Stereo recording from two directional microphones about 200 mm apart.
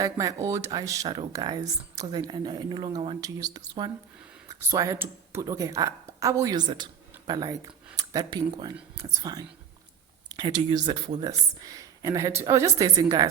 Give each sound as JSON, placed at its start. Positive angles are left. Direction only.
{"t": 0.0, "sound": "a woman's voice", "side_deg": -15}